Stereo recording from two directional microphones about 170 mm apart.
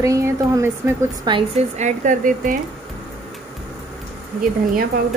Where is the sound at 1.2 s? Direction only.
35° right (ahead or behind); by 2.5 s 50° right (ahead or behind).